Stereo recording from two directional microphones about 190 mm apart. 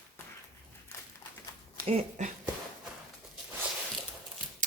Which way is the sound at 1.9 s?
40° right (ahead or behind).